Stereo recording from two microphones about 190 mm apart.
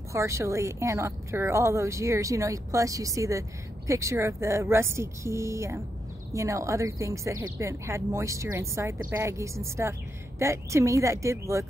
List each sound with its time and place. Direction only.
0.1 s speech: 15° right (ahead or behind)